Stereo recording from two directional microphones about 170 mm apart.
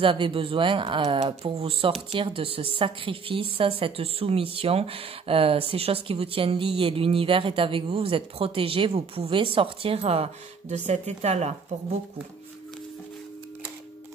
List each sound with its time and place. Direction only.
0.0 s speech: 30° right (ahead or behind)